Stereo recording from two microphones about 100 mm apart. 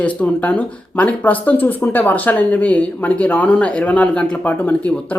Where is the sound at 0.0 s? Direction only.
15° left (ahead or behind).